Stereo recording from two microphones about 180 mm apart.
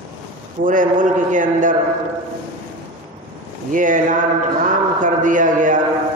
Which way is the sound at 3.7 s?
45° right (ahead or behind).